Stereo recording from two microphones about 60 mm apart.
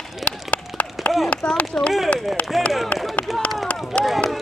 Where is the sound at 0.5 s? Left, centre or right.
Left.